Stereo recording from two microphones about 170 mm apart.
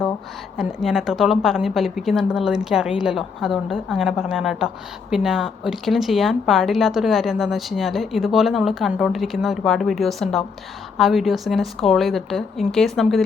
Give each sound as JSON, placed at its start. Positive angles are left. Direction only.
{"t": 0.5, "sound": "speech", "side_deg": 0}